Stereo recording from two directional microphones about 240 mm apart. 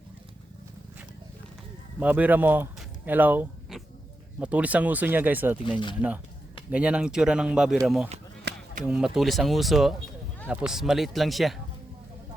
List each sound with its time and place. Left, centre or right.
2.0 s speech: centre
8.5 s a sound: right
8.9 s speech: centre